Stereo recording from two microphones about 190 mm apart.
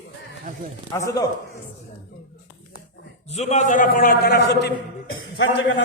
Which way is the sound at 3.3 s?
35° left (ahead or behind).